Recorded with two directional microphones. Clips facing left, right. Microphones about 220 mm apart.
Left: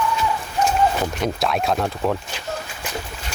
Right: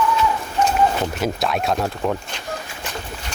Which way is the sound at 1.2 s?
Centre (ahead or behind).